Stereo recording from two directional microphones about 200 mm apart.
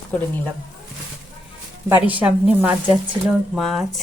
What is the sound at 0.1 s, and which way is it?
Speech, 5° left (ahead or behind).